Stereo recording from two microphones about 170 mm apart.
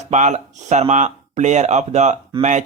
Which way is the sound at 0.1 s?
45° right (ahead or behind).